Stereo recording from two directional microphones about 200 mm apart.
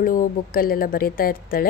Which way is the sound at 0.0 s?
45° left (ahead or behind).